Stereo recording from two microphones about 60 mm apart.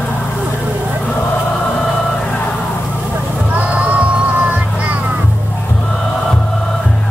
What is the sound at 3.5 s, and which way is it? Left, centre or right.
Music, right.